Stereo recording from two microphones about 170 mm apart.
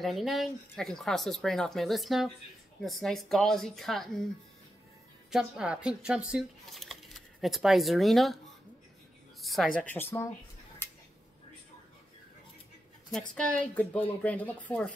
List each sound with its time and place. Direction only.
0.0 s speech: centre (ahead or behind)
5.3 s speech: 5° right (ahead or behind)
9.4 s a sound: centre (ahead or behind)
9.8 s a woman's voice: 15° left (ahead or behind)
10.8 s tick-tock: 15° left (ahead or behind)
13.3 s a woman's voice: 5° left (ahead or behind)